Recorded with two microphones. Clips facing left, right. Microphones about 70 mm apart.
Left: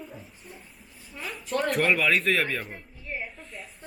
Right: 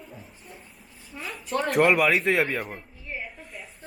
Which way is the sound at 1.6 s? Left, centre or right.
Right.